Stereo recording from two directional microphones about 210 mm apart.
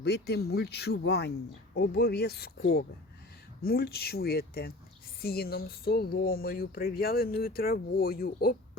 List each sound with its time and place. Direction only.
0.0 s speech: 50° left (ahead or behind)